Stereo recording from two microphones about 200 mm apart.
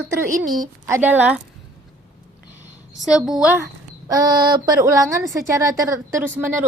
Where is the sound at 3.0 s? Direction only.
5° right (ahead or behind).